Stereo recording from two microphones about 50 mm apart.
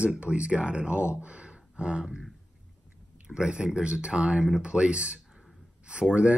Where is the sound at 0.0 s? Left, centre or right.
Right.